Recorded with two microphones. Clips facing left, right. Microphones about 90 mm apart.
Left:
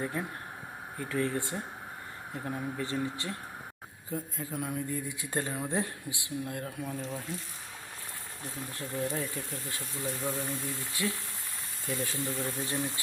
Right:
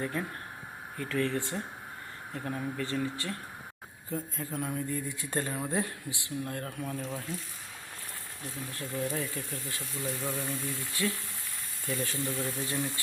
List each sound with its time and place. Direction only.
0.0 s speech: 20° left (ahead or behind)
8.8 s speech: 20° left (ahead or behind)